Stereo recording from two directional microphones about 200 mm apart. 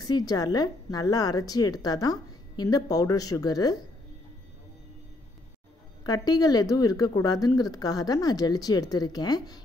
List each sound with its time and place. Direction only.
0.0 s a woman's voice: 20° left (ahead or behind)
6.0 s a woman's voice: 20° left (ahead or behind)